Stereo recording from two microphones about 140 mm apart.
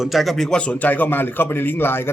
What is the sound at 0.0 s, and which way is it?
A man's voice, centre (ahead or behind).